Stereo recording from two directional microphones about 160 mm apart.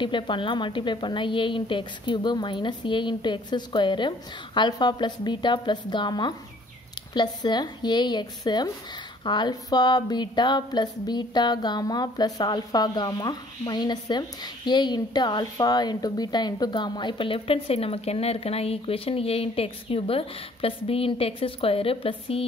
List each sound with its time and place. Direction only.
0.0 s speech: 30° left (ahead or behind)